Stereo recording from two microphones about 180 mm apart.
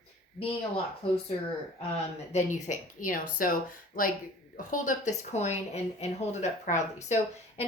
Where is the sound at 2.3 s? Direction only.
45° left (ahead or behind).